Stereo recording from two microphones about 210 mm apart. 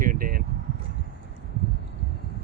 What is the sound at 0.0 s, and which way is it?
Vehicle, 40° right (ahead or behind).